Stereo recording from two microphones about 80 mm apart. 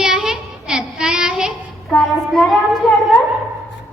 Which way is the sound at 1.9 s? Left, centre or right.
Centre.